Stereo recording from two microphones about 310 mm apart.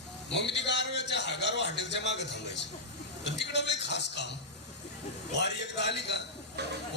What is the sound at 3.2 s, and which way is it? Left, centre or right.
A woman's voice, left.